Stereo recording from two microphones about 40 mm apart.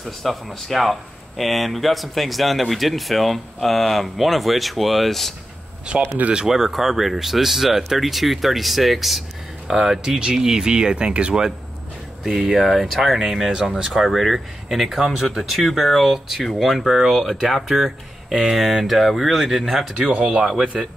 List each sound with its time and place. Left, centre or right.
0.0 s speech: centre
6.3 s speech: centre
9.7 s speech: centre
12.2 s speech: centre
13.2 s speech: centre